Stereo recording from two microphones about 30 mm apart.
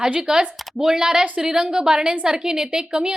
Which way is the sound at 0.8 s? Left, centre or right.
Centre.